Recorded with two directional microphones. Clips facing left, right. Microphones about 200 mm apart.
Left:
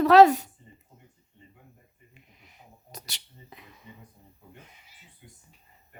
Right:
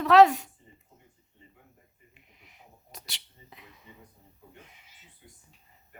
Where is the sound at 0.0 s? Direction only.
40° left (ahead or behind).